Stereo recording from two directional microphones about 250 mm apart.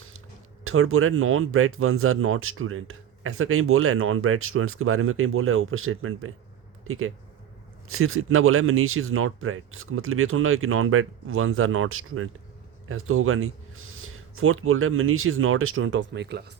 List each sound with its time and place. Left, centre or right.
0.6 s speech: right